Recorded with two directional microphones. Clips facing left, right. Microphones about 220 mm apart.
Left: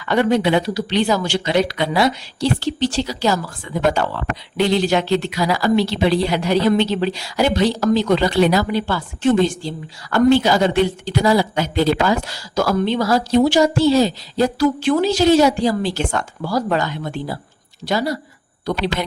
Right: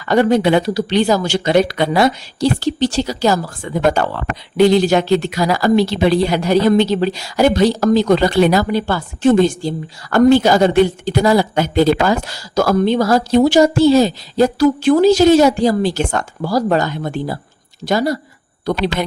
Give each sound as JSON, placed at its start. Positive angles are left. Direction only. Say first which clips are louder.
{"t": 0.0, "sound": "speech", "louder": "right 3 dB", "side_deg": -40}